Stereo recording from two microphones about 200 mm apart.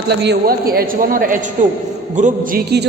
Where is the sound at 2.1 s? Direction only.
40° right (ahead or behind).